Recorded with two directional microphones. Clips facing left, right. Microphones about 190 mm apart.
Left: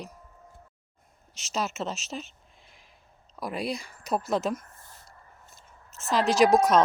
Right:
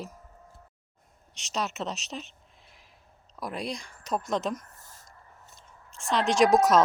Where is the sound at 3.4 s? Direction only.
Centre (ahead or behind).